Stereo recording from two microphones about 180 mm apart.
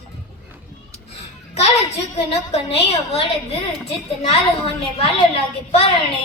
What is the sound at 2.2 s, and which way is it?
Speech, 35° left (ahead or behind).